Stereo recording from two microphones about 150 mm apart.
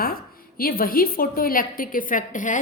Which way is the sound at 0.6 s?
75° left (ahead or behind).